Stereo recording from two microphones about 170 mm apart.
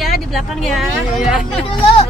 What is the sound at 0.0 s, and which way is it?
Speech, centre (ahead or behind).